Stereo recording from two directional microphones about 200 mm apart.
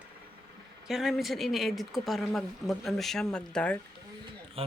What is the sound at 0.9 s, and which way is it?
Speech, centre (ahead or behind).